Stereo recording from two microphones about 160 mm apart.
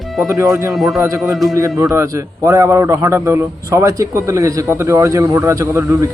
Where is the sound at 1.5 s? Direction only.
20° right (ahead or behind).